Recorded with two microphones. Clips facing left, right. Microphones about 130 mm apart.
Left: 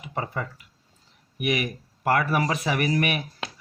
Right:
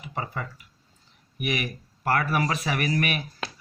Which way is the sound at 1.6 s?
25° left (ahead or behind).